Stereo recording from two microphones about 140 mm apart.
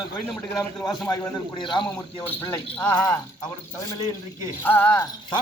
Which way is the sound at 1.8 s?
10° left (ahead or behind).